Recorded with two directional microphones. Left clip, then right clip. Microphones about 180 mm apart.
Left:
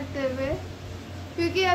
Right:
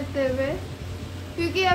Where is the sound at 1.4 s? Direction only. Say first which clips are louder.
Right 1 dB; 10° left (ahead or behind).